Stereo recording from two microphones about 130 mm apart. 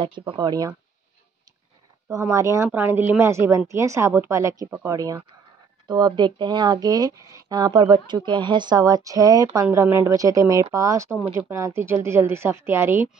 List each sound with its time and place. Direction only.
0.4 s speech: 30° right (ahead or behind)
2.0 s speech: 25° right (ahead or behind)
5.9 s speech: 35° right (ahead or behind); by 13.1 s 20° right (ahead or behind)